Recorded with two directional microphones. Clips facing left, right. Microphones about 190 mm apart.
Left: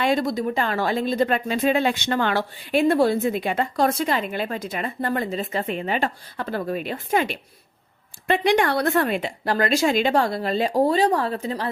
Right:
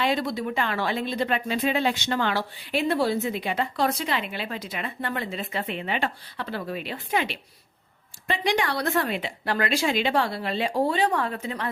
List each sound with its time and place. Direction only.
0.0 s speech: 45° left (ahead or behind)
8.3 s speech: 55° left (ahead or behind); by 11.7 s 35° left (ahead or behind)